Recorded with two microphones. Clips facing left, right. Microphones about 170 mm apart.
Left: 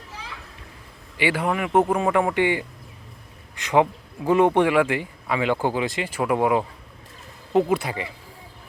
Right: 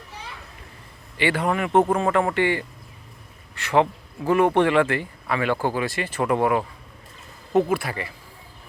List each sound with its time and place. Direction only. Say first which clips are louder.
1.1 s speech: right 1 dB; 10° left (ahead or behind)